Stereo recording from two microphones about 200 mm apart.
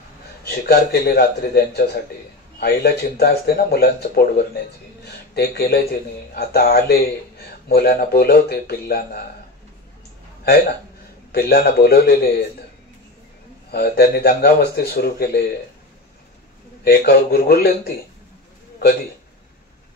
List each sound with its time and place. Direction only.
0.5 s speech: 50° left (ahead or behind)
11.3 s speech: 50° left (ahead or behind)
13.7 s speech: 50° left (ahead or behind)
16.8 s speech: 55° left (ahead or behind)